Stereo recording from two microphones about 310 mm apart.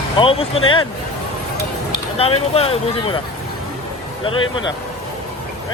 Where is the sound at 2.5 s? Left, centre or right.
Centre.